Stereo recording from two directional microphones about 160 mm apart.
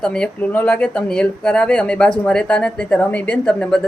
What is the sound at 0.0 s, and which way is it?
Speech, 5° left (ahead or behind).